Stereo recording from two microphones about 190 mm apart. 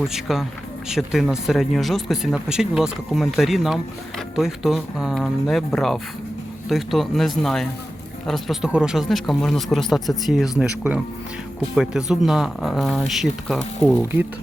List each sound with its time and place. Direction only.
0.0 s speech: centre (ahead or behind)